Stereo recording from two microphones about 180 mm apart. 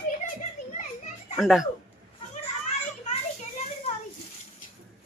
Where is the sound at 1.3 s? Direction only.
Centre (ahead or behind).